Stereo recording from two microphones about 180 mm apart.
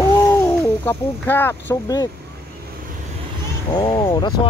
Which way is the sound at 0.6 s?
10° left (ahead or behind).